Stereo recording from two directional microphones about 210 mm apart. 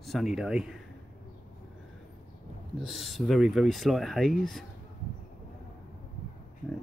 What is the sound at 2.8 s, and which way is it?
Speech, centre (ahead or behind).